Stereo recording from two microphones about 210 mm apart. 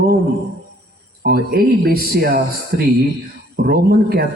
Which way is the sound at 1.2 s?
45° right (ahead or behind).